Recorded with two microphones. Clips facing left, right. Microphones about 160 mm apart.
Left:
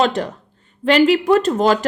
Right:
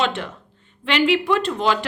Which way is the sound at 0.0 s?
40° left (ahead or behind).